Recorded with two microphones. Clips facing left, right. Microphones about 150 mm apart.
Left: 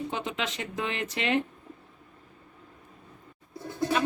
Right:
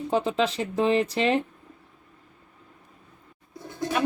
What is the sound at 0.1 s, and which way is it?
Speech, 35° right (ahead or behind).